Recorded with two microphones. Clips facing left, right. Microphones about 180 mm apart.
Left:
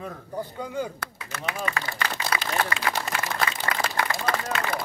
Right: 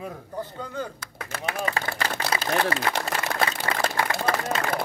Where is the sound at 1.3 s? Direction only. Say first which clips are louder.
Right 2 dB; 30° right (ahead or behind).